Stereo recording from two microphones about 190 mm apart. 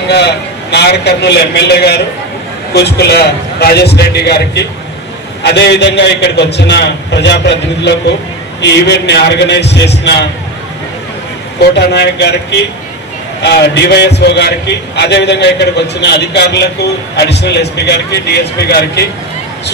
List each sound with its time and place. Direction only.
0.1 s a man's voice: 60° left (ahead or behind)
11.7 s a man's voice: 65° left (ahead or behind)